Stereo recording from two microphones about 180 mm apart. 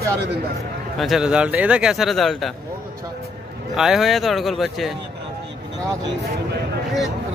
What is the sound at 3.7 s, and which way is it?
Speech, 5° right (ahead or behind).